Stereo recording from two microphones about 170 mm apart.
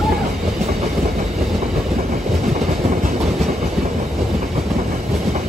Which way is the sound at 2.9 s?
45° right (ahead or behind).